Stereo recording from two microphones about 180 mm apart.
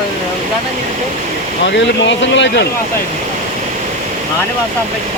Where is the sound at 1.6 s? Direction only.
80° left.